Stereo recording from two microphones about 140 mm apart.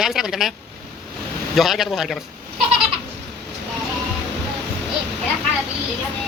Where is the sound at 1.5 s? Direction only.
Centre (ahead or behind).